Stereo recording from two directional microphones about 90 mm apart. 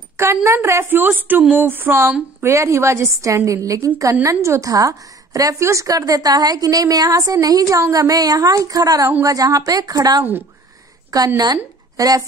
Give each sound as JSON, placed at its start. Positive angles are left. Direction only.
{"t": 0.2, "sound": "a woman's voice", "side_deg": -30}